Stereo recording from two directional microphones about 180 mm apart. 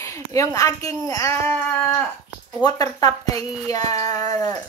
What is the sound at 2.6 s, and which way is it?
A woman's voice, 20° left (ahead or behind).